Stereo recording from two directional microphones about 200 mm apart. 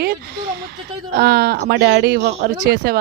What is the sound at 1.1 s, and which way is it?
Speech, 50° right (ahead or behind).